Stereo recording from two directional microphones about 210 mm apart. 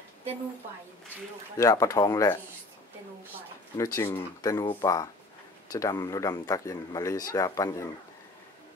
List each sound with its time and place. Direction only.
1.6 s speech: 15° left (ahead or behind)
3.7 s speech: 15° left (ahead or behind)